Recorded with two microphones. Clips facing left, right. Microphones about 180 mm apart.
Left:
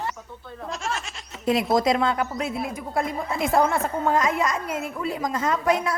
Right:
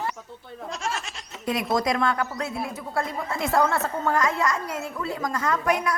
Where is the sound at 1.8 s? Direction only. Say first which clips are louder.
Left 2 dB; 20° left (ahead or behind).